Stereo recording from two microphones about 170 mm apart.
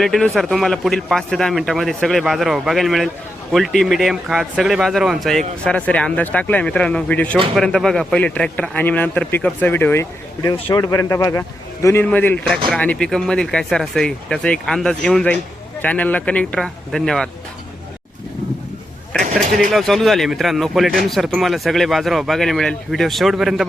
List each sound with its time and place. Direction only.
0.0 s speech: centre (ahead or behind)
19.7 s speech: centre (ahead or behind)